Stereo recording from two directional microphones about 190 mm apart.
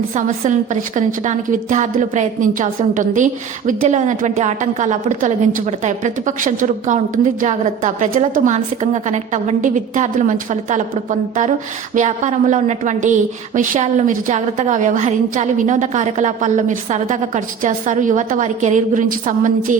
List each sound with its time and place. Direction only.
0.1 s a woman's voice: 40° right (ahead or behind)